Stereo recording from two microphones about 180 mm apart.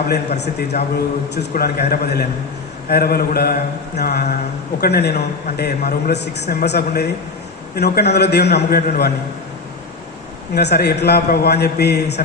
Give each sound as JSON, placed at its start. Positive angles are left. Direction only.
{"t": 0.7, "sound": "a man's voice", "side_deg": 55}
{"t": 10.5, "sound": "a man's voice", "side_deg": 65}